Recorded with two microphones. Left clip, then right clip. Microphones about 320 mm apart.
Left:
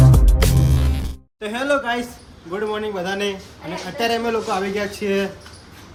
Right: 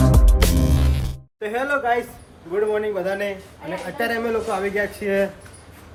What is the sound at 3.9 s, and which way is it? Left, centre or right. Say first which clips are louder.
A man's voice: left 3 dB; centre.